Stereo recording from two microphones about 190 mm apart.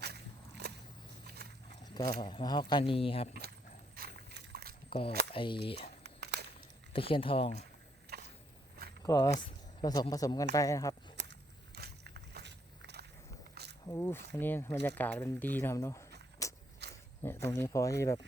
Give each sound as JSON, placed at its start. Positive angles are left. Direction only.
{"t": 0.0, "sound": "walk", "side_deg": -60}
{"t": 1.4, "sound": "horse", "side_deg": -55}
{"t": 1.8, "sound": "speech", "side_deg": 20}
{"t": 3.9, "sound": "a sound", "side_deg": -55}
{"t": 4.9, "sound": "speech", "side_deg": 30}
{"t": 6.0, "sound": "a sound", "side_deg": -60}
{"t": 6.9, "sound": "speech", "side_deg": 30}
{"t": 9.0, "sound": "speech", "side_deg": 20}
{"t": 11.2, "sound": "walk", "side_deg": -60}
{"t": 13.8, "sound": "a sound", "side_deg": 15}
{"t": 14.3, "sound": "speech", "side_deg": 10}